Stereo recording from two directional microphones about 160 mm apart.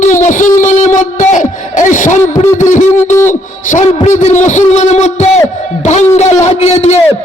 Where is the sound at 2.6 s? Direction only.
50° left (ahead or behind).